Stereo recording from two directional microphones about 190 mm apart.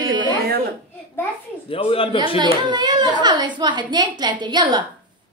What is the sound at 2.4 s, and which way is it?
A woman's voice, 25° right (ahead or behind).